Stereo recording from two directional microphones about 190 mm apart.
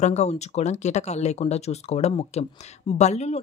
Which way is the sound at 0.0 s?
35° left (ahead or behind).